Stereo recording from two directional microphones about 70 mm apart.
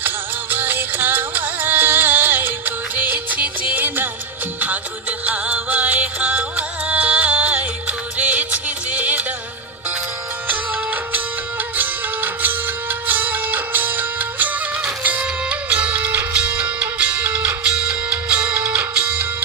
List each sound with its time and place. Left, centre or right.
0.5 s music: right
5.2 s music: right
11.8 s music: right